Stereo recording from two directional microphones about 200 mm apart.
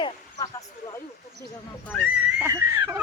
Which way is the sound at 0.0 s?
20° left (ahead or behind).